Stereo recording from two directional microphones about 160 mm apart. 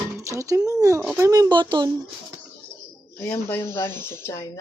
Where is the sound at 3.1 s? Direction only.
15° left (ahead or behind).